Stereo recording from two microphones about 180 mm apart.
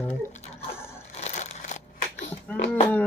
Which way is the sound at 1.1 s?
40° left (ahead or behind).